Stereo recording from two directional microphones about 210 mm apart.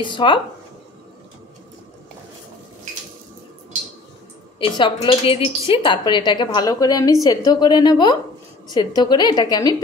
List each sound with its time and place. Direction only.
0.0 s speech: 20° left (ahead or behind)
4.6 s speech: 20° left (ahead or behind)